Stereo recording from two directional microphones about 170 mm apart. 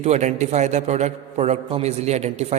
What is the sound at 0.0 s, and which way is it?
A man's voice, 45° right (ahead or behind).